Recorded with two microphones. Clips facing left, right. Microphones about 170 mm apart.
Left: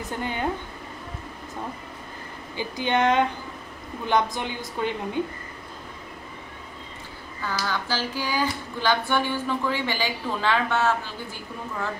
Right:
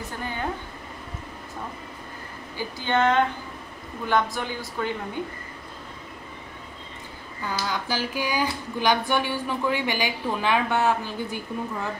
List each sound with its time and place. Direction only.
0.2 s a woman's voice: 20° left (ahead or behind)
2.5 s a woman's voice: 15° left (ahead or behind)
7.4 s a sound: 15° right (ahead or behind)